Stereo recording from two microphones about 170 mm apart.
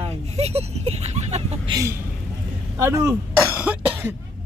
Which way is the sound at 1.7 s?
20° right (ahead or behind).